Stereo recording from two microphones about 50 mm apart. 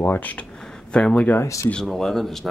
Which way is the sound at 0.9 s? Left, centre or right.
Left.